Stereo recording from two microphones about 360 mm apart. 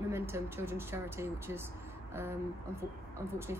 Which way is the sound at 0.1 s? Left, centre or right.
Centre.